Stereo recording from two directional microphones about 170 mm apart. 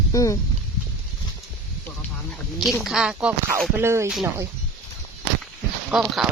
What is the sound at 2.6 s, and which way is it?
Speech, centre (ahead or behind).